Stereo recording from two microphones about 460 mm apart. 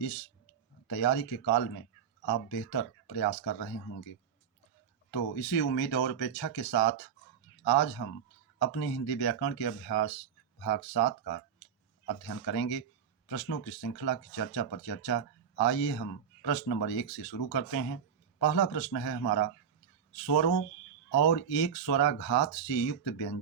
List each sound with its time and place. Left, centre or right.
0.9 s speech: left
2.6 s speech: left
5.1 s speech: left
12.5 s speech: left